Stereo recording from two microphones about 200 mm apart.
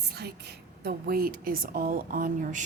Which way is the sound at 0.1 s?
50° right (ahead or behind).